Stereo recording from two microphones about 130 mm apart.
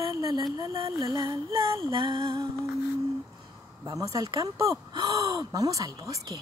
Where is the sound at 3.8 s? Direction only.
25° right (ahead or behind).